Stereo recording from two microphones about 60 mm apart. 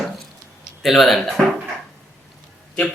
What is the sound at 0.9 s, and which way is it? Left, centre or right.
Speech, centre.